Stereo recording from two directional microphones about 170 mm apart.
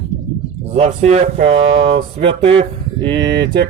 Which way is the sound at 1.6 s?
90° right.